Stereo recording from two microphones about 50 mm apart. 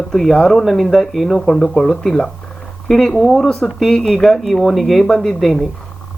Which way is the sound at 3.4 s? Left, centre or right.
Centre.